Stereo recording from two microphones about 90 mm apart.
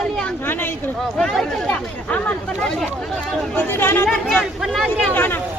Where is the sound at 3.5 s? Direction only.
25° left (ahead or behind).